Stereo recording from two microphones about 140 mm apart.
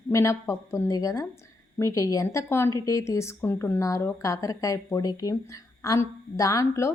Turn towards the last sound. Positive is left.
turn(degrees=20)  # may be behind; listen again after turning